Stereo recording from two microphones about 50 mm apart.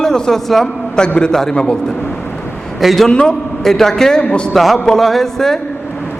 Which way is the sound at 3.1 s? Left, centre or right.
Centre.